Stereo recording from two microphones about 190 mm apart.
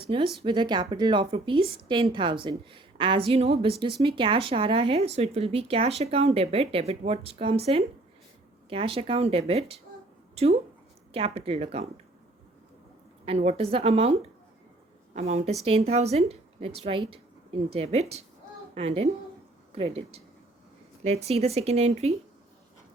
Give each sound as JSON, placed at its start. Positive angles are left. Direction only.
{"t": 0.0, "sound": "a woman's voice", "side_deg": -25}
{"t": 13.2, "sound": "speech", "side_deg": -35}
{"t": 15.1, "sound": "a woman's voice", "side_deg": -35}